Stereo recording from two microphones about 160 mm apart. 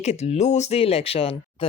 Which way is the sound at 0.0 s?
45° left (ahead or behind).